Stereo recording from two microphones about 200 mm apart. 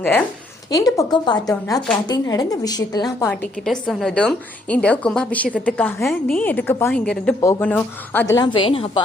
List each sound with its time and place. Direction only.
0.7 s a woman's voice: 20° left (ahead or behind)
3.7 s a woman's voice: 5° left (ahead or behind); by 9.0 s 25° left (ahead or behind)